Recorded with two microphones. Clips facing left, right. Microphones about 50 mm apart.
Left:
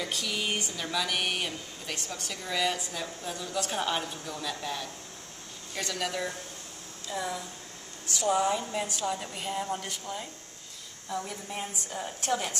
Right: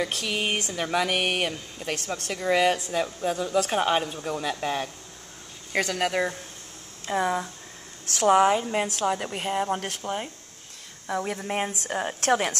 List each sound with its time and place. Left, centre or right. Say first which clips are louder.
0.0 s speech: right 5 dB; right
0.9 s speech: right 6 dB; right
8.1 s speech: right 7 dB; right